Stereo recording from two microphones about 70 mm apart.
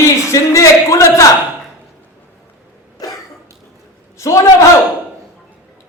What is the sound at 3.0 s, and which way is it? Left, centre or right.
Cough, left.